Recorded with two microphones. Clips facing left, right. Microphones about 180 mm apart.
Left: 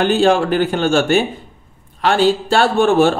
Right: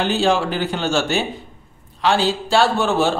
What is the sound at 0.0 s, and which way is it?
A man's voice, 50° left (ahead or behind).